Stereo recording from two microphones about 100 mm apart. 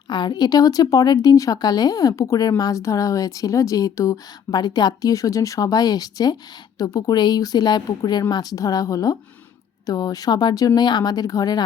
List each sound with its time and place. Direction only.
0.1 s speech: 45° left (ahead or behind)